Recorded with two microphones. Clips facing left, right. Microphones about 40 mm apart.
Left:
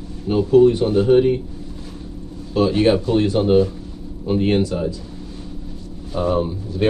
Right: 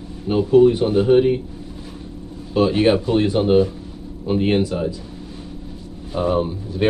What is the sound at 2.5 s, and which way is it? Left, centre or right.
Speech, centre.